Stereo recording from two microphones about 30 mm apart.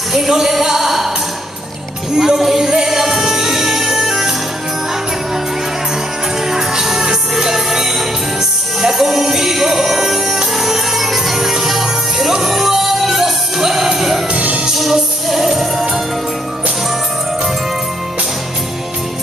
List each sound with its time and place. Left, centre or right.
0.3 s music: centre
2.1 s music: centre
6.5 s music: centre